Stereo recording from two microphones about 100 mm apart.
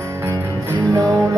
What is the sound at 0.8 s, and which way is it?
Music, 10° left (ahead or behind).